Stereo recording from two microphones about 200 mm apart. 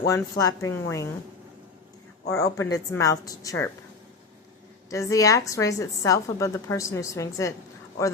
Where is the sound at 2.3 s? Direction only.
15° left (ahead or behind).